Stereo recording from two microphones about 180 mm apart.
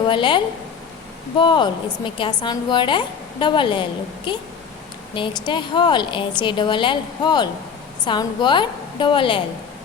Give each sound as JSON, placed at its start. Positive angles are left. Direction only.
{"t": 0.0, "sound": "a woman's voice", "side_deg": 25}